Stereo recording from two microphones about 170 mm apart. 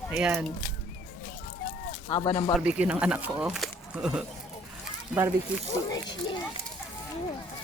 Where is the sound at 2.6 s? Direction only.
10° right (ahead or behind).